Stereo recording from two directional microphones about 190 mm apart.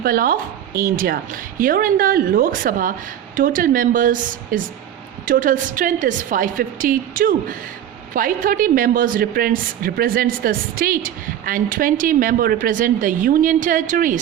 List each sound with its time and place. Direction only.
0.0 s a woman's voice: 50° right (ahead or behind)